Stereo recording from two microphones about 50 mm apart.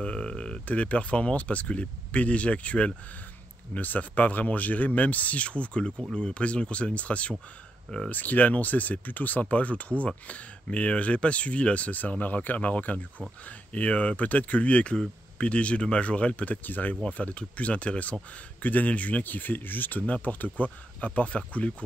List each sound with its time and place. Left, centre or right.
0.0 s a sound: centre
0.7 s speech: left
16.6 s speech: left
17.0 s speech: left